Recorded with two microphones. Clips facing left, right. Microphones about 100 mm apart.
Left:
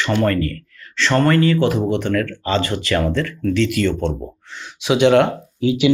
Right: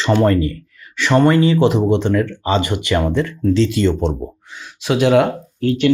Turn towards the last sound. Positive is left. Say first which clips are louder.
# even
turn(degrees=5)  # may be behind; listen again after turning